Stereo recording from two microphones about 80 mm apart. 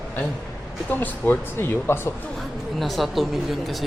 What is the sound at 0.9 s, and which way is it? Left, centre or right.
Speech, left.